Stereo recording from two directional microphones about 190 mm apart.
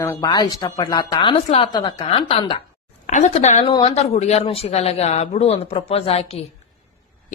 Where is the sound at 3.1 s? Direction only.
35° left (ahead or behind).